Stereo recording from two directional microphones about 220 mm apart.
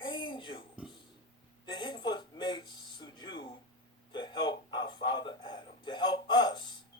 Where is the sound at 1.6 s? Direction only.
20° left (ahead or behind).